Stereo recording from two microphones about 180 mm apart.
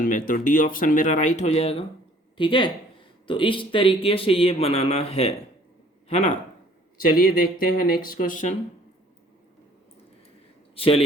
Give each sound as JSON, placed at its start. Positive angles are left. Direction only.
{"t": 0.0, "sound": "speech", "side_deg": 50}
{"t": 7.0, "sound": "speech", "side_deg": 55}
{"t": 10.8, "sound": "a man's voice", "side_deg": 30}